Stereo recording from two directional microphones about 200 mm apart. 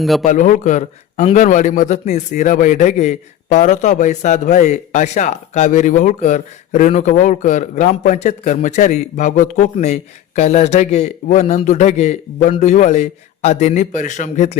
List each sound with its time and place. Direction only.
0.0 s a man's voice: centre (ahead or behind)
0.3 s a man's voice: 40° left (ahead or behind)